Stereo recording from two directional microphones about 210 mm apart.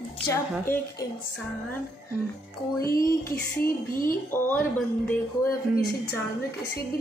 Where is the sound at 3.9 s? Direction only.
40° left (ahead or behind).